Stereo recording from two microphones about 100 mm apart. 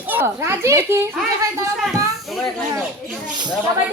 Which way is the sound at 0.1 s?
25° right (ahead or behind).